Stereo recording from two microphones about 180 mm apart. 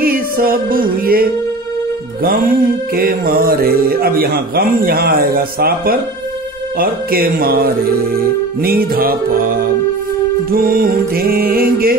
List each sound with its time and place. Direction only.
0.0 s music: 55° right (ahead or behind)
2.2 s mantra: 50° right (ahead or behind)
10.5 s mantra: 55° right (ahead or behind)